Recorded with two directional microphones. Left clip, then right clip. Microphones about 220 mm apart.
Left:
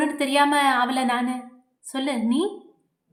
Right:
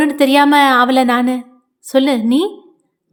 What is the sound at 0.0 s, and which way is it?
A woman's voice, 35° right (ahead or behind).